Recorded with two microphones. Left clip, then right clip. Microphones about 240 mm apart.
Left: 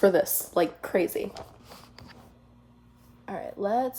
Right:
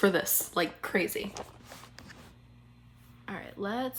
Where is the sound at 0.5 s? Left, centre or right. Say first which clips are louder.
Left 5 dB; right.